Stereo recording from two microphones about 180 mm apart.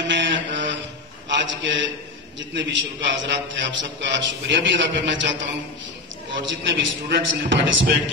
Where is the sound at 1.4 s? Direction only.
85° right.